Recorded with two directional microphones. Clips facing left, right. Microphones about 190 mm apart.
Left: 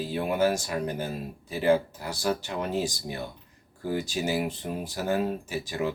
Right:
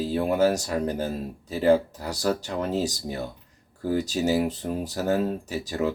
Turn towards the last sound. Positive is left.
turn(degrees=-40)  # may be behind; listen again after turning